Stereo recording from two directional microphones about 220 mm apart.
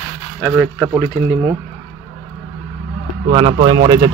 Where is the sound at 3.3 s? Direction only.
20° right (ahead or behind).